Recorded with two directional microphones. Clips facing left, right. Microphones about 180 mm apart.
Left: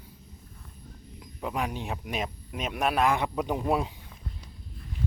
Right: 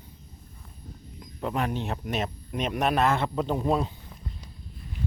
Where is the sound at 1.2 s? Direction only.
5° left (ahead or behind).